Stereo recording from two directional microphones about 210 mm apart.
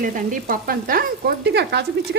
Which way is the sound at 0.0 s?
40° right (ahead or behind).